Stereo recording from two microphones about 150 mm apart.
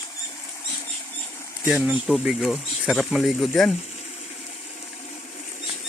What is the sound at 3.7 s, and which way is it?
Water, 45° left (ahead or behind).